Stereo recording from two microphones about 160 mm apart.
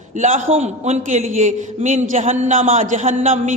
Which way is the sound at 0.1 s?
50° right (ahead or behind).